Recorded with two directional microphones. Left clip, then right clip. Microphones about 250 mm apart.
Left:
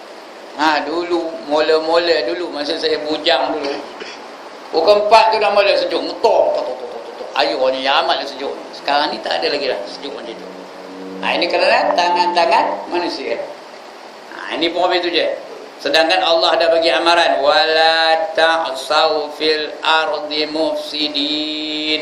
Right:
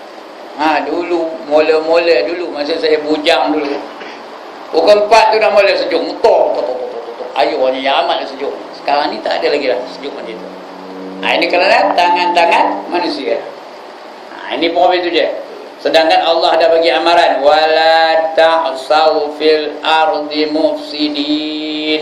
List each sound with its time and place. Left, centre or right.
0.6 s a man's voice: centre
4.7 s a man's voice: centre
7.3 s a man's voice: centre
11.2 s a man's voice: centre
14.5 s a man's voice: centre